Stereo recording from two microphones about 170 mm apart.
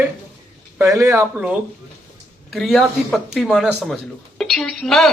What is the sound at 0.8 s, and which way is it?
Speech, 15° right (ahead or behind).